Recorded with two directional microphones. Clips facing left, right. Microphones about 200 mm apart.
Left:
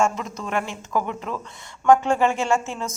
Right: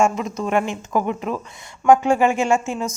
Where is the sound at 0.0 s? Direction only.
15° right (ahead or behind).